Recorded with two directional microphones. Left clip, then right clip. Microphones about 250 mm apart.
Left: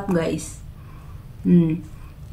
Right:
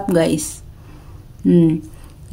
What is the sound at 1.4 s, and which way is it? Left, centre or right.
Speech, right.